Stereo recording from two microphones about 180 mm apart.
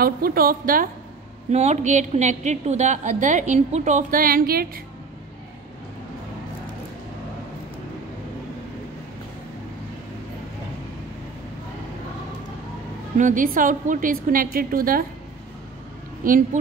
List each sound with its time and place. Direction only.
0.0 s a woman's voice: 55° right (ahead or behind)
1.5 s a woman's voice: 40° right (ahead or behind); by 4.6 s 55° right (ahead or behind)
13.2 s a woman's voice: 45° right (ahead or behind)
16.2 s a woman's voice: 50° right (ahead or behind)